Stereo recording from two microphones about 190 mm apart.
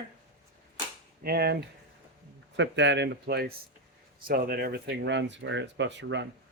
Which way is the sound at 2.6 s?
70° right (ahead or behind).